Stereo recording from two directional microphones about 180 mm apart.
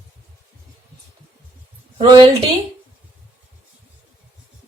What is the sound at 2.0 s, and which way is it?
Speech, 30° right (ahead or behind).